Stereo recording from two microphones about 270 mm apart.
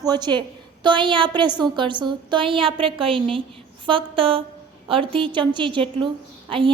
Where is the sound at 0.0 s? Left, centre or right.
Centre.